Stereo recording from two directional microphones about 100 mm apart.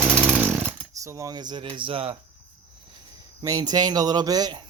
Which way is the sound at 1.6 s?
60° right (ahead or behind).